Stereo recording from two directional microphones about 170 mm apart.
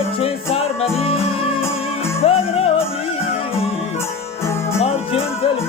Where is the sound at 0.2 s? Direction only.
35° left (ahead or behind).